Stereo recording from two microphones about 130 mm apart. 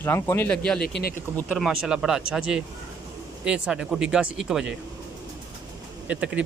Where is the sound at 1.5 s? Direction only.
5° right (ahead or behind).